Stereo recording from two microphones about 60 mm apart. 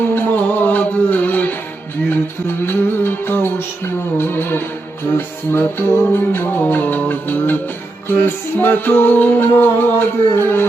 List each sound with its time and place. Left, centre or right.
0.0 s music: left
2.6 s music: left
9.5 s music: left